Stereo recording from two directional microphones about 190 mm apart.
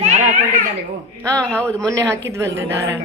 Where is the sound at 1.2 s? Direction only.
15° right (ahead or behind).